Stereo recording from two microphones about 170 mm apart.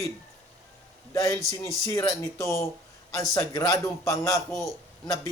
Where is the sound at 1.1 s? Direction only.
20° left (ahead or behind).